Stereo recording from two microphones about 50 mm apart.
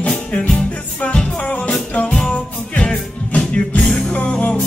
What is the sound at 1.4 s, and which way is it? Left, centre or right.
Music, left.